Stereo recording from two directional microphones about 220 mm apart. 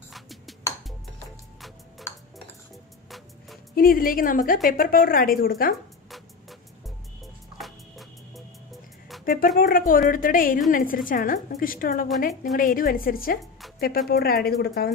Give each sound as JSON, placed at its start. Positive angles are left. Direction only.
{"t": 0.1, "sound": "music", "side_deg": 0}
{"t": 3.7, "sound": "a woman's voice", "side_deg": 40}
{"t": 7.5, "sound": "music", "side_deg": 0}
{"t": 9.2, "sound": "a sound", "side_deg": 40}
{"t": 9.6, "sound": "a woman's voice", "side_deg": 40}